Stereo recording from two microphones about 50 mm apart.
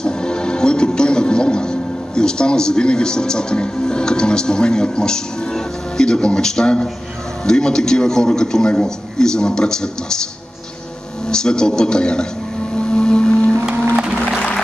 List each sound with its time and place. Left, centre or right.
0.0 s a man's voice: centre
11.2 s a man's voice: centre
12.7 s music: centre